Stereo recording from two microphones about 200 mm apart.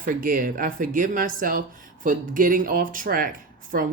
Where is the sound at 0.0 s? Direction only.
45° right (ahead or behind).